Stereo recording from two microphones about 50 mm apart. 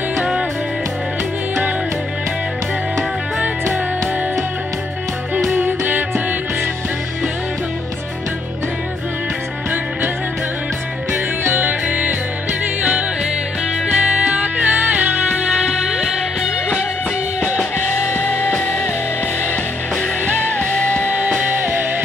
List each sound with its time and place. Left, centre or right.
5.6 s music: right
11.4 s music: right
11.9 s music: right
13.8 s music: right
14.7 s music: right
15.6 s music: centre
18.1 s music: left
20.7 s music: left
21.1 s music: right
21.5 s music: right